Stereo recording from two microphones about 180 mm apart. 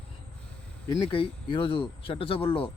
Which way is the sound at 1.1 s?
30° left (ahead or behind).